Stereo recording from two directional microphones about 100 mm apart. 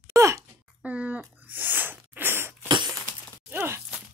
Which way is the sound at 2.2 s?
20° right (ahead or behind).